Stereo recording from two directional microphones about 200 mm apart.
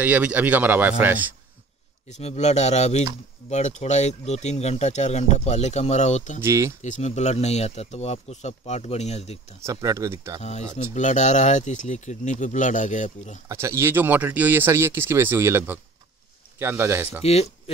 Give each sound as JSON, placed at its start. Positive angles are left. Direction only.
{"t": 0.0, "sound": "speech", "side_deg": -5}
{"t": 2.0, "sound": "speech", "side_deg": 35}
{"t": 6.4, "sound": "speech", "side_deg": -15}
{"t": 6.8, "sound": "speech", "side_deg": 35}
{"t": 9.7, "sound": "speech", "side_deg": -15}
{"t": 10.4, "sound": "speech", "side_deg": 35}
{"t": 13.5, "sound": "speech", "side_deg": -15}
{"t": 17.2, "sound": "speech", "side_deg": 30}